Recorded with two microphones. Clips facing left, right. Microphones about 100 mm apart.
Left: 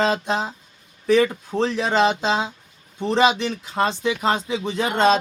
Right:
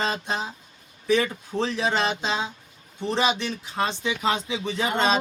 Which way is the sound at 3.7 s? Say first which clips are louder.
Left 5 dB; 75° left (ahead or behind).